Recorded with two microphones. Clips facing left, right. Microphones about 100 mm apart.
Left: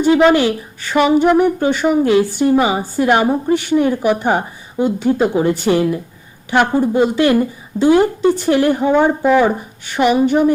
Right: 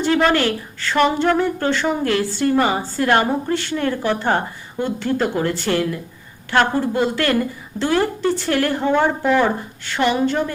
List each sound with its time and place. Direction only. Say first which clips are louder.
0.0 s a woman's voice: left 6 dB; 15° left (ahead or behind)